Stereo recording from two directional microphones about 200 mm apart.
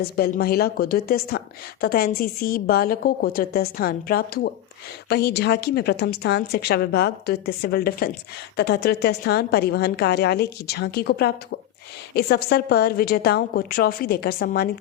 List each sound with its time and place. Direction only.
0.0 s a woman's voice: 50° left (ahead or behind)